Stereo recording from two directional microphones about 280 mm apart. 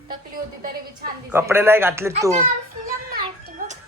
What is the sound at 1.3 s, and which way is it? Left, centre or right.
Speech, centre.